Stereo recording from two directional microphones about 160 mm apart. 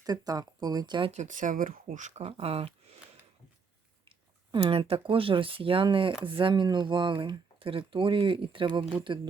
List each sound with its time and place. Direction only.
0.0 s speech: 25° right (ahead or behind)
1.1 s speech: 50° right (ahead or behind)
4.5 s speech: 30° right (ahead or behind)